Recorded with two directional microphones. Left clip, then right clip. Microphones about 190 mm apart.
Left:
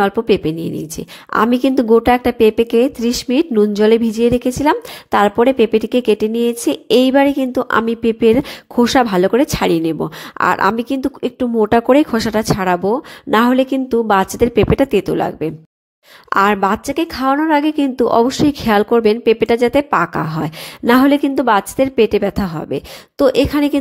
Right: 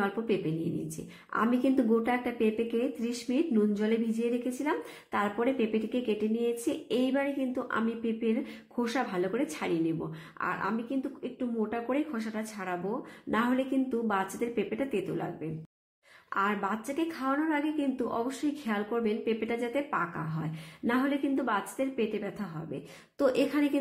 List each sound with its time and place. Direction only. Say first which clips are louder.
1.3 s a woman's voice: left 14 dB; 45° left (ahead or behind)